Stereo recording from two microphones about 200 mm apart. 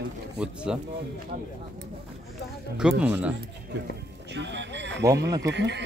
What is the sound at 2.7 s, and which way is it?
Speech, 5° right (ahead or behind).